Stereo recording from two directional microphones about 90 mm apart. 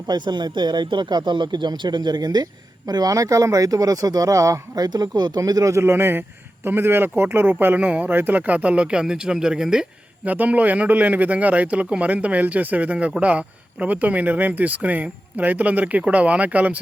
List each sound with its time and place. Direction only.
0.1 s speech: 55° right (ahead or behind)
5.4 s a man's voice: 40° right (ahead or behind); by 16.8 s 15° right (ahead or behind)